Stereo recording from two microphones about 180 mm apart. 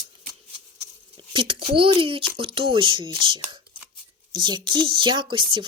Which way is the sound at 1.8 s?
30° right (ahead or behind).